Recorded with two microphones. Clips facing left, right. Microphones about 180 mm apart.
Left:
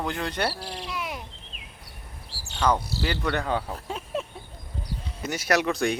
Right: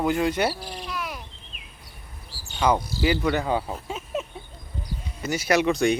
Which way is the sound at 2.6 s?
10° right (ahead or behind).